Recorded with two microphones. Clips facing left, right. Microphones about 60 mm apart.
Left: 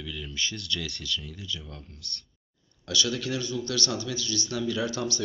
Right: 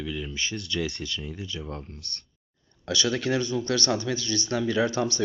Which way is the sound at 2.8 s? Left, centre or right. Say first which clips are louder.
Right 3 dB; right.